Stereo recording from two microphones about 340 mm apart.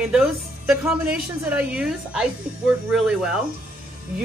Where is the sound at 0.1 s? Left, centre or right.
Centre.